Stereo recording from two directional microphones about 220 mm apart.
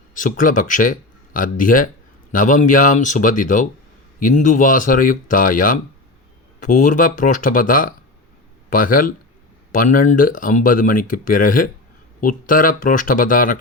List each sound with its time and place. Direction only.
0.1 s speech: 35° left (ahead or behind)